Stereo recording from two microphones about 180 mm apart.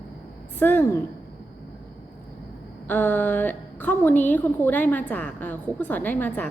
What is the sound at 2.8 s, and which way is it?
A woman's voice, 10° left (ahead or behind).